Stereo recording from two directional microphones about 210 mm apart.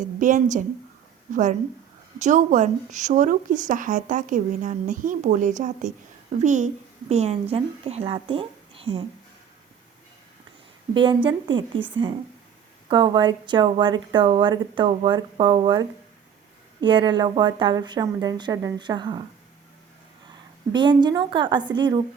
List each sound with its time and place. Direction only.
0.2 s a woman's voice: 35° right (ahead or behind)
10.9 s a woman's voice: 25° right (ahead or behind)
12.9 s a woman's voice: 20° right (ahead or behind)
20.7 s a woman's voice: 20° right (ahead or behind)